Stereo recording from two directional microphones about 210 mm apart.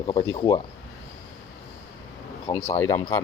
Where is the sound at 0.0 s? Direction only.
25° left (ahead or behind).